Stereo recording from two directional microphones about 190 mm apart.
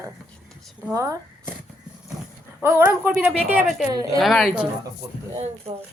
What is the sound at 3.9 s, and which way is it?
Speech, 20° right (ahead or behind).